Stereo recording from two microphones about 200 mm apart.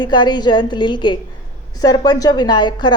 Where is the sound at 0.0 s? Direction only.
20° left (ahead or behind).